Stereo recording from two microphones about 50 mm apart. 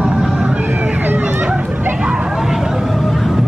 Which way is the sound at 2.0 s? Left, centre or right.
Centre.